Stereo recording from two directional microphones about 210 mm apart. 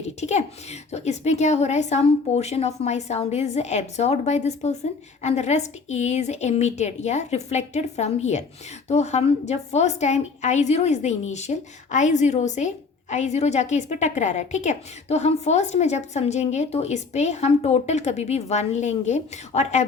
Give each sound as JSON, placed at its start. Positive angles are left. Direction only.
{"t": 0.2, "sound": "a woman's voice", "side_deg": 30}